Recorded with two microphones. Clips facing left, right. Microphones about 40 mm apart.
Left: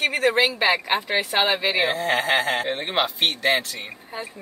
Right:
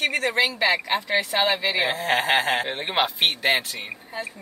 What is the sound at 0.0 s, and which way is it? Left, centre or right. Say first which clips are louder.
Speech: left 2 dB; centre.